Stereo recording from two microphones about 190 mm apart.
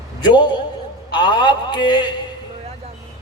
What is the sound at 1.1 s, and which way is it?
Speech, 25° left (ahead or behind).